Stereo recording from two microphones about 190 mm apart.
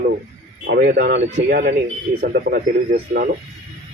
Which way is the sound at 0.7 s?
50° right (ahead or behind).